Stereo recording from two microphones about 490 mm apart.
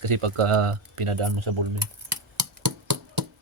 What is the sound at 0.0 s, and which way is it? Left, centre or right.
Speech, right.